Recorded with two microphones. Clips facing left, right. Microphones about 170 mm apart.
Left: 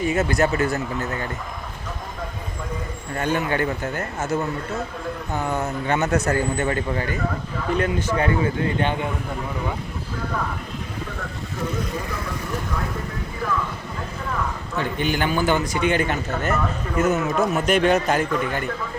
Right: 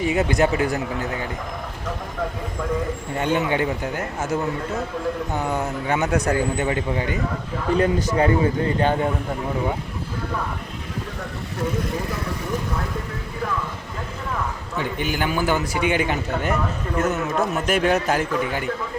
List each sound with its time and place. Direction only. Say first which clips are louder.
0.0 s speech: right 1 dB; 15° right (ahead or behind)
3.2 s speech: right 1 dB; 20° right (ahead or behind)
7.8 s a man's voice: right 3 dB; 35° right (ahead or behind)
14.8 s speech: left 1 dB; 10° right (ahead or behind)
17.0 s a man's voice: left 2 dB; centre (ahead or behind)